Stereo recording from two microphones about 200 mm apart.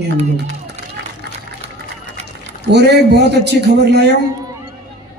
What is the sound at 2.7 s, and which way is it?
Speech, 55° right (ahead or behind).